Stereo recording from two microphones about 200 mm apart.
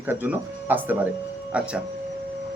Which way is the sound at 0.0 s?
10° right (ahead or behind).